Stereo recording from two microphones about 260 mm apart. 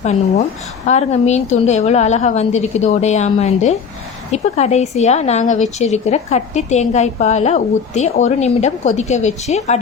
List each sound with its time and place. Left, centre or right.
0.0 s speech: left